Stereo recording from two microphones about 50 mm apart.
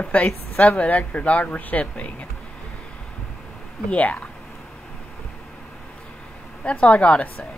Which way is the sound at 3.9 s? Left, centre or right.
Left.